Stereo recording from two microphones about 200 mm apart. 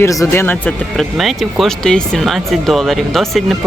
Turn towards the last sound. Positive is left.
turn(degrees=0)  # may be behind; listen again after turning